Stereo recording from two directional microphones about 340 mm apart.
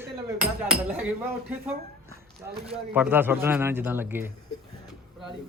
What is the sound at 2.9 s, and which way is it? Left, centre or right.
A man's voice, centre.